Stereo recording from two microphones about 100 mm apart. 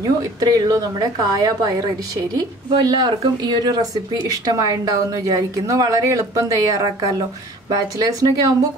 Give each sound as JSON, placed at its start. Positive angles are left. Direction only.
{"t": 0.0, "sound": "a woman's voice", "side_deg": -40}